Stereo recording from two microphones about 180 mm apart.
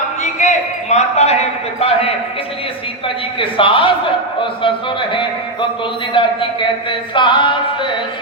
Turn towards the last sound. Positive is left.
turn(degrees=25)  # may be behind; listen again after turning